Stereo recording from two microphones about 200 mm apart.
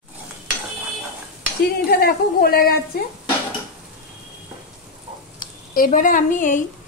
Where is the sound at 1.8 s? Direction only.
50° left (ahead or behind).